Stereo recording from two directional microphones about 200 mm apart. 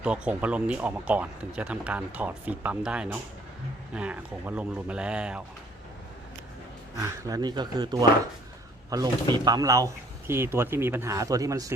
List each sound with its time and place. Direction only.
0.0 s speech: 5° right (ahead or behind)
7.3 s speech: 20° right (ahead or behind)